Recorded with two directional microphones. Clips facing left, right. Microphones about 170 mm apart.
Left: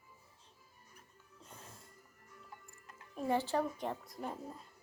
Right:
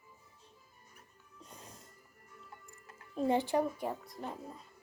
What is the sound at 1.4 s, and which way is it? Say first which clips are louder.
Music: right 2 dB; 15° right (ahead or behind).